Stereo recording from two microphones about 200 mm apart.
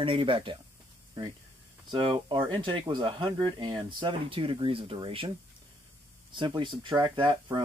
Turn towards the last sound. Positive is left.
turn(degrees=-20)  # may be behind; listen again after turning